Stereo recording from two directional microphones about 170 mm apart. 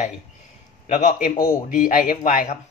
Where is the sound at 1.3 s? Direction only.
20° left (ahead or behind).